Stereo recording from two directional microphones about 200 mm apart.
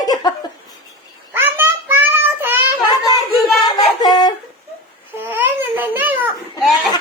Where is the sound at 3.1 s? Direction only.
20° left (ahead or behind).